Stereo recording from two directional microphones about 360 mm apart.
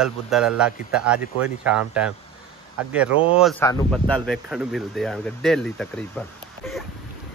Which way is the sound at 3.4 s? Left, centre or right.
Centre.